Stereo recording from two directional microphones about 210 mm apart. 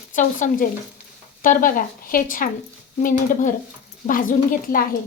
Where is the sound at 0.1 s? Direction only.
35° left (ahead or behind).